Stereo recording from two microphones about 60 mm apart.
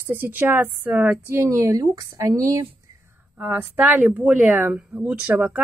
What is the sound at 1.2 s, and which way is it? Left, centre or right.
Speech, right.